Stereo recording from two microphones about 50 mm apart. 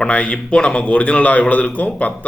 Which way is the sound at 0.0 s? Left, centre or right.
Left.